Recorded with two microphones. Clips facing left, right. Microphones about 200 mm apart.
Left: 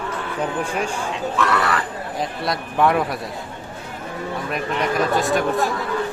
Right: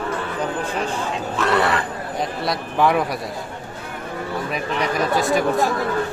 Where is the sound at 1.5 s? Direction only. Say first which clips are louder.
Right 6 dB; 25° right (ahead or behind).